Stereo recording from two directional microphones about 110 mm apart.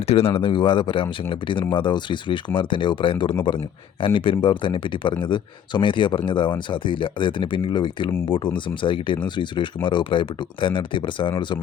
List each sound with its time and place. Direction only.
0.0 s speech: 65° left (ahead or behind); by 11.5 s 45° left (ahead or behind)